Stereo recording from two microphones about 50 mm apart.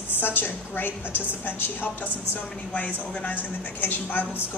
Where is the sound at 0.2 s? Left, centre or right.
Left.